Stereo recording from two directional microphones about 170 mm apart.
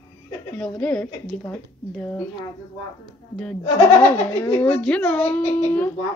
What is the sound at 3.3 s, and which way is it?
A woman's voice, 5° left (ahead or behind).